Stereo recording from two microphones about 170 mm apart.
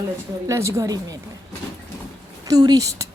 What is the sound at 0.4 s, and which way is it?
Speech, 15° right (ahead or behind).